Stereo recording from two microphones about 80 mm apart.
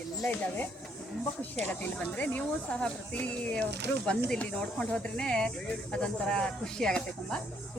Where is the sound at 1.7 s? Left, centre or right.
Centre.